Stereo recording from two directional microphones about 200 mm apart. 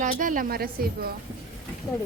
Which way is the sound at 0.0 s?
40° right (ahead or behind).